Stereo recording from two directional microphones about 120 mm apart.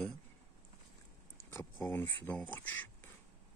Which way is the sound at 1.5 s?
20° left (ahead or behind).